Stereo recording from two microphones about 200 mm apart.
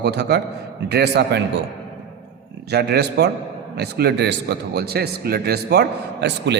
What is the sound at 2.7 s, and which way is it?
Speech, 55° right (ahead or behind).